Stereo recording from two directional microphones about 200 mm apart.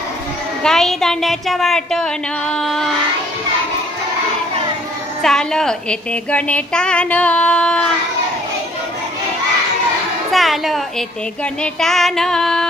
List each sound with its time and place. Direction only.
0.7 s a woman's voice: centre (ahead or behind)
5.2 s a woman's voice: 5° left (ahead or behind)
10.3 s a woman's voice: centre (ahead or behind)